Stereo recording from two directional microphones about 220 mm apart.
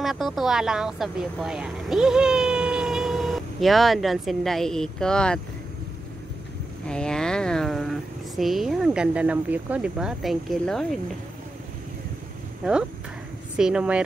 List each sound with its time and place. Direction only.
0.0 s speech: centre (ahead or behind)
6.9 s speech: 5° left (ahead or behind)
13.6 s speech: 5° right (ahead or behind)